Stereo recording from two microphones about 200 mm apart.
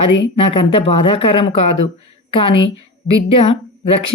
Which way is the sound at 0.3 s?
30° left (ahead or behind).